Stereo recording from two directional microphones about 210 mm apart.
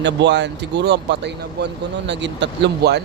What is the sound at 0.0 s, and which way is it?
Speech, 55° right (ahead or behind).